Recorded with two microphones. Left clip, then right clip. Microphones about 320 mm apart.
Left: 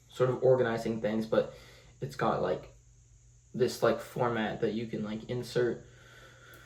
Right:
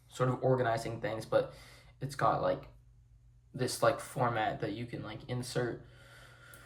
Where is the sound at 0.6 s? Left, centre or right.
Right.